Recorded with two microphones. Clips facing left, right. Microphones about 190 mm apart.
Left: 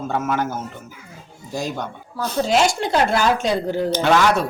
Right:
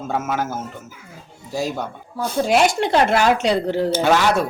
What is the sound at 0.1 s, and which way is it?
Speech, 5° right (ahead or behind).